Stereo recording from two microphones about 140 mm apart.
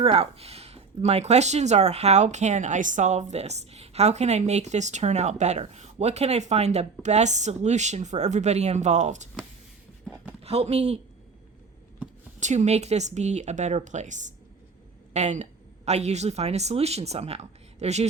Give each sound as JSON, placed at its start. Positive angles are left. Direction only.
{"t": 0.0, "sound": "speech", "side_deg": -45}
{"t": 10.4, "sound": "speech", "side_deg": -45}
{"t": 12.4, "sound": "speech", "side_deg": -55}